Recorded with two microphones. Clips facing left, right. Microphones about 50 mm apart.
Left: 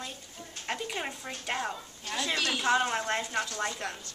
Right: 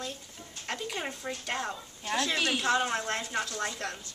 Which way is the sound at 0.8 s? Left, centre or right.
Centre.